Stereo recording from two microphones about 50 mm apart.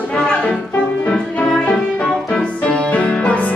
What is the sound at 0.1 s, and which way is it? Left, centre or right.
Music, centre.